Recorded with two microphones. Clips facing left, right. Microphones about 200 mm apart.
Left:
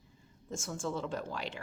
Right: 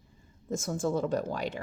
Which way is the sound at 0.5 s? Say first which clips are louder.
Right 7 dB; 40° right (ahead or behind).